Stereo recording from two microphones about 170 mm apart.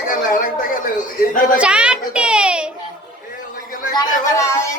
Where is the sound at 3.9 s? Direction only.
20° left (ahead or behind).